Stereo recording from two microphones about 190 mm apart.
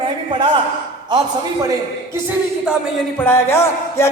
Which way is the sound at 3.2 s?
10° left (ahead or behind).